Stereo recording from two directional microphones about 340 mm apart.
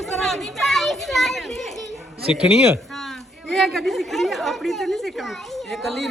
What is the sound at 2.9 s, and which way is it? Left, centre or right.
A man's voice, centre.